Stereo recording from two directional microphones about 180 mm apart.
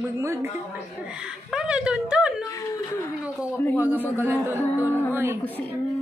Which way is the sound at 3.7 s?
10° right (ahead or behind).